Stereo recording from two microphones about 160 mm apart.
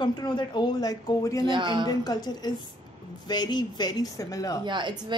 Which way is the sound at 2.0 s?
25° left (ahead or behind).